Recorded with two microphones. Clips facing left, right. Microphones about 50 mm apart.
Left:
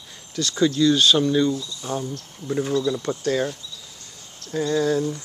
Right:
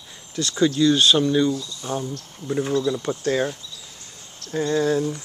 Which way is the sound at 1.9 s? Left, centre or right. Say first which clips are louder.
Even; right.